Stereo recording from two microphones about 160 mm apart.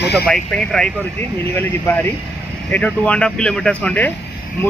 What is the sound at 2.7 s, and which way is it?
Speech, 10° left (ahead or behind).